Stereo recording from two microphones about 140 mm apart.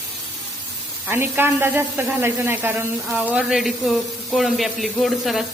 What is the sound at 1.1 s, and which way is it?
A woman's voice, 15° right (ahead or behind).